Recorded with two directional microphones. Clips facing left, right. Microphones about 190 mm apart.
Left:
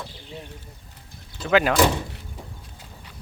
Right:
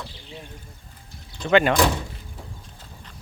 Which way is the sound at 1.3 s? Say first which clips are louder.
Right 1 dB; 5° left (ahead or behind).